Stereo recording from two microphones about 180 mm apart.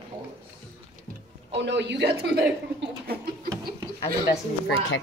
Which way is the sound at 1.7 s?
75° right (ahead or behind).